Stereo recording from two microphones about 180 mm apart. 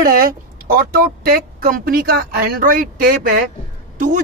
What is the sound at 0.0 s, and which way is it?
Speech, 55° right (ahead or behind).